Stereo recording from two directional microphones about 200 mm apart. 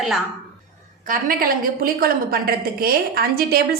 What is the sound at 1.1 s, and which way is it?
A woman's voice, 45° right (ahead or behind).